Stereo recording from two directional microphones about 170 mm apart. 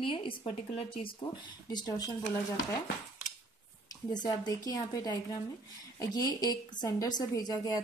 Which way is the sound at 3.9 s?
25° left (ahead or behind).